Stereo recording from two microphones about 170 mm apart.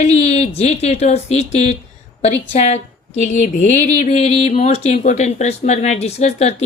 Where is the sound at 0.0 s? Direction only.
40° left (ahead or behind).